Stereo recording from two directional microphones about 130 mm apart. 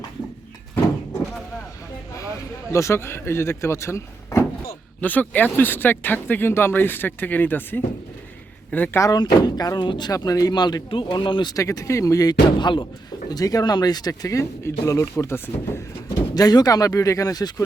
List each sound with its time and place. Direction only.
2.7 s speech: 20° left (ahead or behind)
4.9 s speech: 15° left (ahead or behind); by 11.5 s 40° left (ahead or behind)
11.5 s speech: 25° left (ahead or behind)
16.3 s speech: 30° left (ahead or behind)